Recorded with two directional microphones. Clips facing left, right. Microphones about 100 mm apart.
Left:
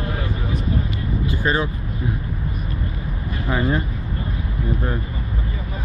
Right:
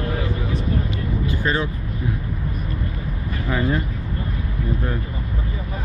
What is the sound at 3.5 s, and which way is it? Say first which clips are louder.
Speech: left 1 dB; 20° left (ahead or behind).